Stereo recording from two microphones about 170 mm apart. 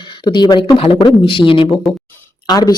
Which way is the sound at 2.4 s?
25° left (ahead or behind).